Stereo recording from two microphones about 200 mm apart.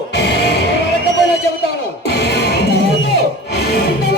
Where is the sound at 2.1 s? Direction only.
55° left (ahead or behind).